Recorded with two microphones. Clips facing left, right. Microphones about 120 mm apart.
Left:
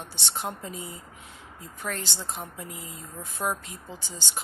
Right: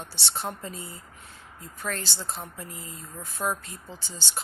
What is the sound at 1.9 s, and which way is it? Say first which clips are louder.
A woman's voice: even; 20° left (ahead or behind).